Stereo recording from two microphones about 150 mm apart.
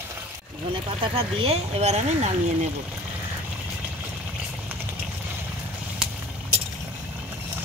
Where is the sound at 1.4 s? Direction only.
40° right (ahead or behind).